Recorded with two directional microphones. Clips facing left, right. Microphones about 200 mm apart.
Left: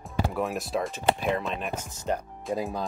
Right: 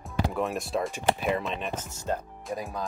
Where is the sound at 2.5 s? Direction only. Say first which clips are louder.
Left 4 dB; 30° left (ahead or behind).